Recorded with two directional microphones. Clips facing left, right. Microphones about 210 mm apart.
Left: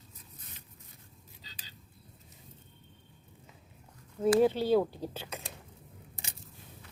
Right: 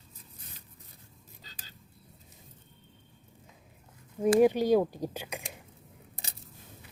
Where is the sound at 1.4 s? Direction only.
45° right (ahead or behind).